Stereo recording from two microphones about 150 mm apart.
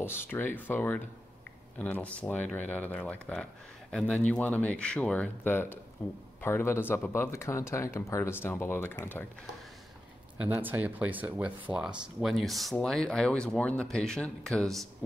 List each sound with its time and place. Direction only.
0.0 s speech: 15° left (ahead or behind)
10.4 s speech: 10° right (ahead or behind)